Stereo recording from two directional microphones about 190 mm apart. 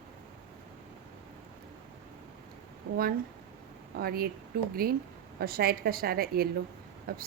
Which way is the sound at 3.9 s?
50° right (ahead or behind).